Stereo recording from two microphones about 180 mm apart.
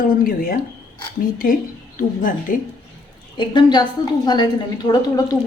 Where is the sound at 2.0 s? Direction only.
50° left (ahead or behind).